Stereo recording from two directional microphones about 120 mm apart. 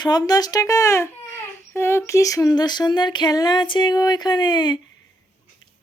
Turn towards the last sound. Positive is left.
turn(degrees=40)  # may be behind; listen again after turning